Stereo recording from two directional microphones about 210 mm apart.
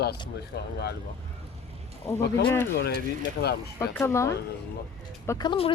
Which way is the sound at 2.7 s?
50° left (ahead or behind).